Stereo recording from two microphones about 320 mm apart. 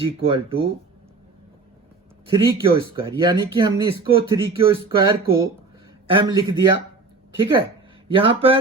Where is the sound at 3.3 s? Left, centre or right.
Centre.